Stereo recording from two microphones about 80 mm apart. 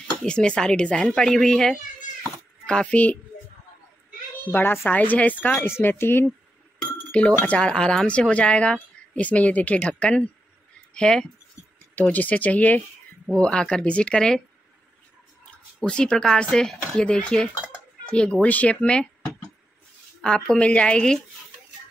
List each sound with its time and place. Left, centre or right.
0.2 s speech: centre
4.5 s speech: left
7.1 s speech: centre
11.9 s speech: left
15.8 s speech: centre
20.2 s speech: centre